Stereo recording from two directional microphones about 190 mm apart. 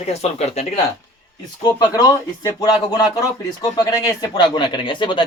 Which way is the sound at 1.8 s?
20° left (ahead or behind).